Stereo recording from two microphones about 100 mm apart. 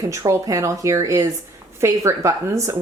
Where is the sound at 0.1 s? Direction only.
35° right (ahead or behind).